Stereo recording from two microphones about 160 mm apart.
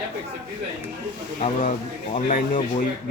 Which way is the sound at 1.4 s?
50° left (ahead or behind).